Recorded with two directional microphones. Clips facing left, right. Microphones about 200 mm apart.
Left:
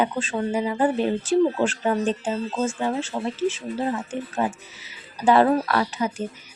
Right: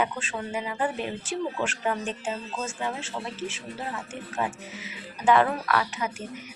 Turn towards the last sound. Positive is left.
turn(degrees=30)  # may be behind; listen again after turning